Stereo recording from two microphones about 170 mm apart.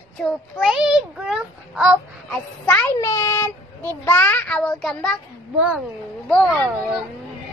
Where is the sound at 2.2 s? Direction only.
10° left (ahead or behind).